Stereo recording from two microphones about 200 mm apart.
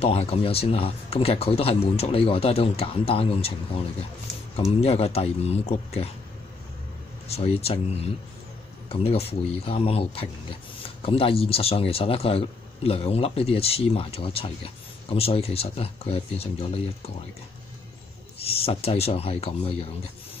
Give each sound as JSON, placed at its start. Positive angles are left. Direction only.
{"t": 0.0, "sound": "a man's voice", "side_deg": 30}
{"t": 7.2, "sound": "a man's voice", "side_deg": 30}
{"t": 18.4, "sound": "speech", "side_deg": 30}